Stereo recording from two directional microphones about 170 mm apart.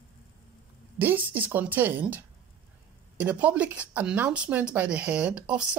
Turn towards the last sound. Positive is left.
turn(degrees=-5)  # may be behind; listen again after turning